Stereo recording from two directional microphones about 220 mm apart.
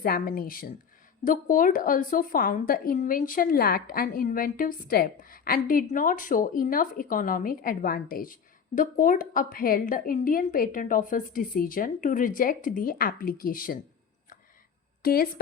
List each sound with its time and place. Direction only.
0.0 s speech: 40° left (ahead or behind)
15.0 s speech: 45° left (ahead or behind)